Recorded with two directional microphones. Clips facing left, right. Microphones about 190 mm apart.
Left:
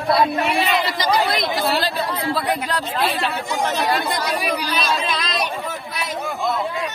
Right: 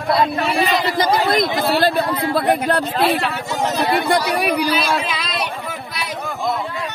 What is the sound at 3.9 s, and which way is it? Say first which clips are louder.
Speech: right 4 dB; 65° right (ahead or behind).